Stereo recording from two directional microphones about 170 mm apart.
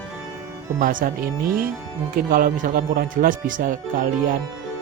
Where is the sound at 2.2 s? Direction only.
55° right (ahead or behind).